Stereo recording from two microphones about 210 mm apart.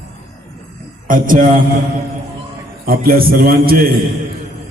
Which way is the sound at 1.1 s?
40° right (ahead or behind).